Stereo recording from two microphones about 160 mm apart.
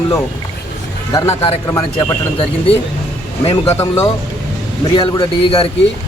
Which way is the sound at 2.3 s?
35° left (ahead or behind).